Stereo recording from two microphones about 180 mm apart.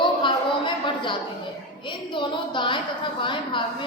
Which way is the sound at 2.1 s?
25° left (ahead or behind).